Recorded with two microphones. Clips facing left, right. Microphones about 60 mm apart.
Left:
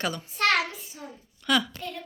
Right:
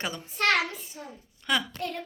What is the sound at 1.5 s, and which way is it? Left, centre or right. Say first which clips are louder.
Speech: left 3 dB; centre.